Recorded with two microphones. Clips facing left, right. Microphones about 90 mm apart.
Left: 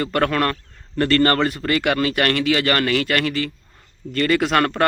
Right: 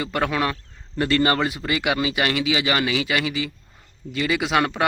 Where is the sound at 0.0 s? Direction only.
5° right (ahead or behind).